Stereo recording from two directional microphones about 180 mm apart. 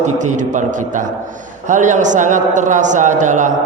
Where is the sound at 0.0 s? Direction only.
45° right (ahead or behind).